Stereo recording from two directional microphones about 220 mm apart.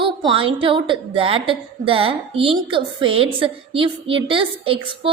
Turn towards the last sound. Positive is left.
turn(degrees=-25)  # may be behind; listen again after turning